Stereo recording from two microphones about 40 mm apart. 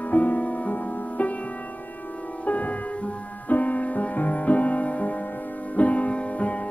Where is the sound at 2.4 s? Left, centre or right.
Left.